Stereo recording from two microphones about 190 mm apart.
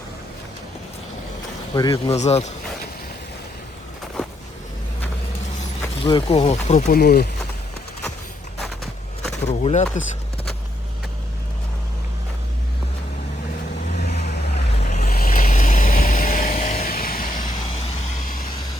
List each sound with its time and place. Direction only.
1.7 s speech: 25° left (ahead or behind)
2.1 s speech: 35° left (ahead or behind)
5.8 s speech: 20° left (ahead or behind)
6.9 s speech: 55° left (ahead or behind)
9.5 s speech: 35° left (ahead or behind)
13.8 s vehicle: 40° left (ahead or behind)
17.6 s vehicle: 30° left (ahead or behind)
18.3 s vehicle: 50° left (ahead or behind)